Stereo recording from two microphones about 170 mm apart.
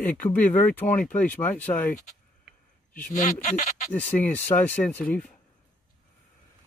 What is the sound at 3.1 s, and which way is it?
Speech, 45° left (ahead or behind).